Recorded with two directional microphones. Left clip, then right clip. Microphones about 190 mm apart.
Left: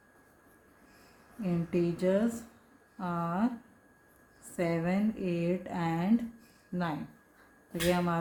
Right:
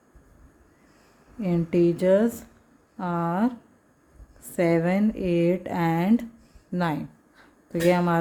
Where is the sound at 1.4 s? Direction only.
45° right (ahead or behind).